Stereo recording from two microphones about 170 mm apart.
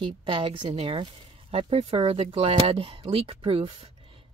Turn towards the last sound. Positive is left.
turn(degrees=-35)  # may be behind; listen again after turning